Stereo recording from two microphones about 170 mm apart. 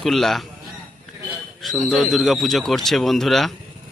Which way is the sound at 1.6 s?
Centre (ahead or behind).